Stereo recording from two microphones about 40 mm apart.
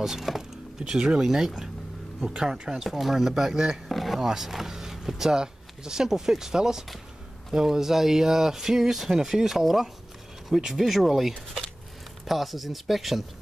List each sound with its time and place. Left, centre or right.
0.0 s speech: centre
3.9 s speech: centre